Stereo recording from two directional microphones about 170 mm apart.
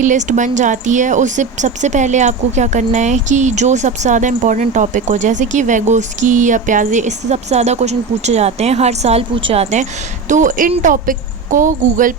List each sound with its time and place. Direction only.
0.0 s speech: 45° right (ahead or behind)
10.2 s speech: 50° right (ahead or behind)